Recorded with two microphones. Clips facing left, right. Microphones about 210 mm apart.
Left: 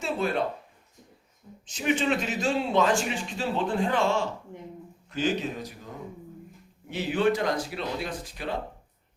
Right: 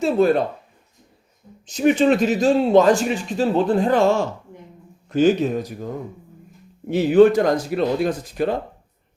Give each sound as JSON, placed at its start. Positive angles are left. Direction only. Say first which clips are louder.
{"t": 0.0, "sound": "speech", "louder": "right 11 dB", "side_deg": -40}
{"t": 1.6, "sound": "speech", "louder": "right 10 dB", "side_deg": -40}